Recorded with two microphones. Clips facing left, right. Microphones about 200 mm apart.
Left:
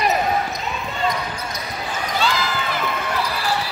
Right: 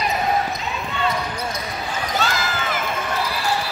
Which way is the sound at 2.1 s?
45° right (ahead or behind).